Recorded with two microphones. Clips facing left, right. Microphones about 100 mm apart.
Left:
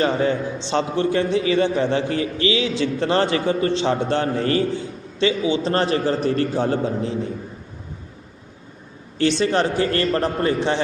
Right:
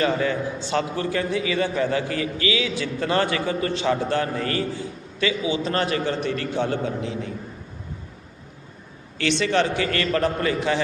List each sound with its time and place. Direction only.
0.0 s a man's voice: 30° left (ahead or behind)
9.1 s a man's voice: 35° left (ahead or behind)